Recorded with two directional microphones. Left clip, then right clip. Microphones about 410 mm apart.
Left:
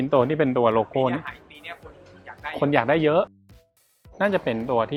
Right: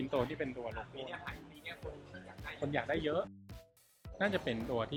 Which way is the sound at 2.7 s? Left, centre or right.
Left.